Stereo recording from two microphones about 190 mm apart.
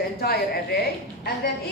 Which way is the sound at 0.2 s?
55° left (ahead or behind).